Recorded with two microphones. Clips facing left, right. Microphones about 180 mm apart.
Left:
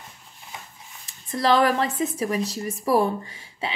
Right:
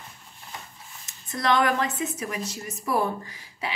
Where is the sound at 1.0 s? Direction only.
30° left (ahead or behind).